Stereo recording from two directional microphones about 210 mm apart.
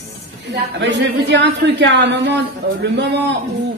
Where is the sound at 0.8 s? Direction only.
55° right (ahead or behind).